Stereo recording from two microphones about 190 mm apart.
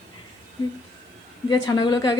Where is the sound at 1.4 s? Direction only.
20° left (ahead or behind).